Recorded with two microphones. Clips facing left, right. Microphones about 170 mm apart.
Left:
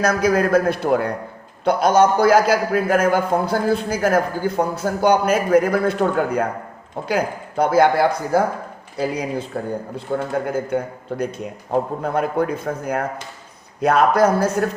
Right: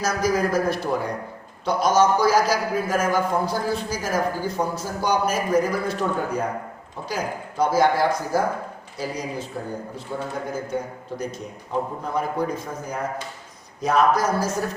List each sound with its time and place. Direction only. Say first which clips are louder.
0.0 s a man's voice: left 5 dB; 60° left (ahead or behind)